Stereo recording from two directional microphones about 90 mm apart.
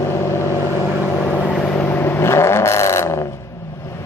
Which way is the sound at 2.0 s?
30° left (ahead or behind).